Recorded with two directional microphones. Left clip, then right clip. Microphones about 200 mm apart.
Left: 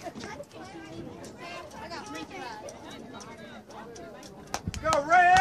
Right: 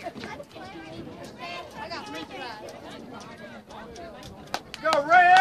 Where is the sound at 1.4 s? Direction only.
15° right (ahead or behind).